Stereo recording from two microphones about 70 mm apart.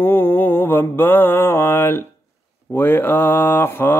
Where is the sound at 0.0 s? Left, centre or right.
Left.